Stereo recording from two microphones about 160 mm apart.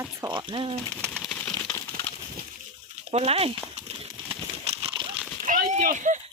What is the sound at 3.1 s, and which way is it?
Speech, 40° right (ahead or behind).